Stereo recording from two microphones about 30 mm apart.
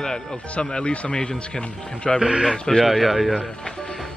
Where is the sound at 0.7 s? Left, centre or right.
Left.